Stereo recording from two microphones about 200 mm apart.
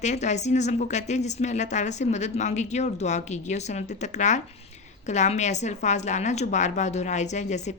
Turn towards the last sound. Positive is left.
turn(degrees=35)  # may be behind; listen again after turning